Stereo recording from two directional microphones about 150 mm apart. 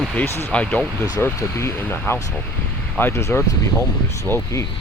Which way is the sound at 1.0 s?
20° left (ahead or behind).